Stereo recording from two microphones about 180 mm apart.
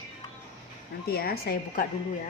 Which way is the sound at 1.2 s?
60° left (ahead or behind).